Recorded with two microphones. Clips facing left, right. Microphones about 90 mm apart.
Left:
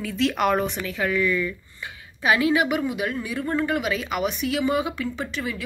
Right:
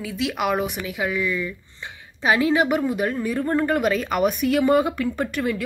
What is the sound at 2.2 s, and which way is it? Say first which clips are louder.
A woman's voice: right 1 dB; 30° right (ahead or behind).